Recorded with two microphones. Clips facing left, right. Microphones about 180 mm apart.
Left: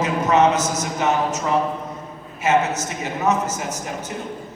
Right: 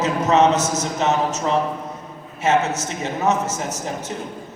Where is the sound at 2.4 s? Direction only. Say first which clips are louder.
Even; 25° right (ahead or behind).